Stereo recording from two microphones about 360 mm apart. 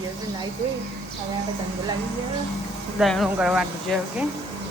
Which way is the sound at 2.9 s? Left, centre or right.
Centre.